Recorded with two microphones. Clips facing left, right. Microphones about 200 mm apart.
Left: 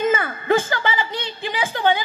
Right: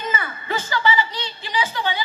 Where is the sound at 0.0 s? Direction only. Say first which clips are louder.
Left 8 dB; 50° left (ahead or behind).